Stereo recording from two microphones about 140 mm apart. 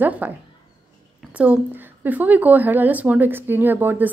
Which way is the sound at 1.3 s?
10° right (ahead or behind).